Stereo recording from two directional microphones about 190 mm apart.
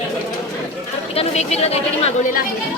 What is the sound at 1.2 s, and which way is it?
Speech, 35° left (ahead or behind).